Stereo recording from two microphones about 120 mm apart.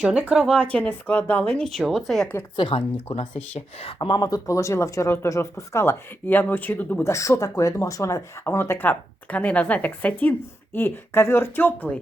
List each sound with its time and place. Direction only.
0.0 s speech: 10° right (ahead or behind)
0.4 s speech: 5° left (ahead or behind)
2.7 s speech: 55° left (ahead or behind)
3.9 s speech: 40° left (ahead or behind); by 7.1 s 15° left (ahead or behind)
7.1 s speech: 25° left (ahead or behind)